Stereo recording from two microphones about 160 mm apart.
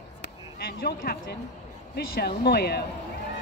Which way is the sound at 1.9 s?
85° left.